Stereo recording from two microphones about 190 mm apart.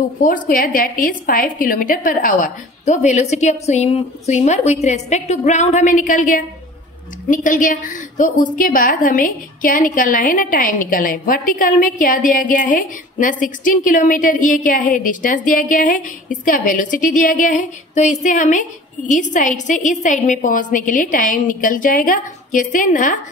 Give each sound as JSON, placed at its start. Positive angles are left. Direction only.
{"t": 0.2, "sound": "a woman's voice", "side_deg": 45}